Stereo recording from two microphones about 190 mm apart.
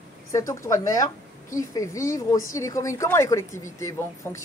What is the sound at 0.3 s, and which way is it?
Speech, 15° left (ahead or behind).